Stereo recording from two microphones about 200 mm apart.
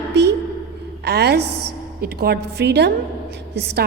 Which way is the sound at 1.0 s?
55° right (ahead or behind).